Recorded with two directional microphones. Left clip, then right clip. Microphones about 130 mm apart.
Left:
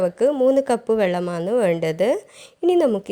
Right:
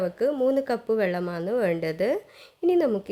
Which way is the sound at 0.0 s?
35° left (ahead or behind).